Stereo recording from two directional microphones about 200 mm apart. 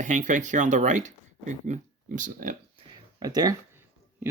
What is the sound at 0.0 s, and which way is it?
Speech, 40° right (ahead or behind).